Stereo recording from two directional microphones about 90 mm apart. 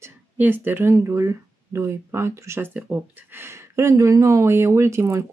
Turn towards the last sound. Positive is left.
turn(degrees=-30)  # may be behind; listen again after turning